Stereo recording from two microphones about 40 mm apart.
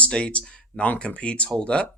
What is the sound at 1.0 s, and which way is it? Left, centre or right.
Speech, left.